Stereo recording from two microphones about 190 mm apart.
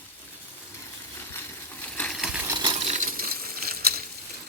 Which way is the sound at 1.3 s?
10° left (ahead or behind).